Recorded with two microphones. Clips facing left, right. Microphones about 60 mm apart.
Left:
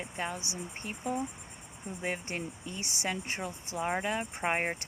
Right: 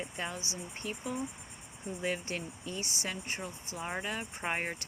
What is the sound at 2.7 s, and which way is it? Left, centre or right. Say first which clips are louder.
Speech: left 2 dB; left.